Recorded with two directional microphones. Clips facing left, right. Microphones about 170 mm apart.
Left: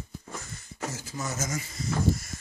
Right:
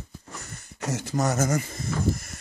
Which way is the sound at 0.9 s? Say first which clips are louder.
Right 11 dB; 70° right (ahead or behind).